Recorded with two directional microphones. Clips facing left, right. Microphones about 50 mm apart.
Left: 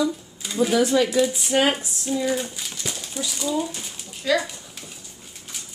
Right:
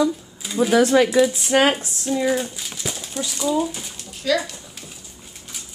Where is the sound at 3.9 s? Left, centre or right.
Centre.